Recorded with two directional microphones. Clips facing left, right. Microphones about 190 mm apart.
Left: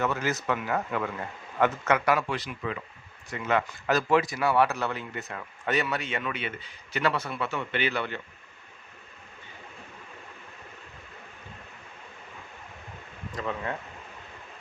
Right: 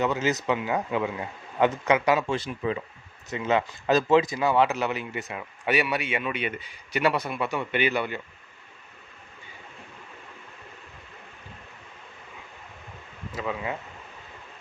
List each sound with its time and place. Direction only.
0.0 s speech: 20° right (ahead or behind)
13.3 s speech: 5° right (ahead or behind)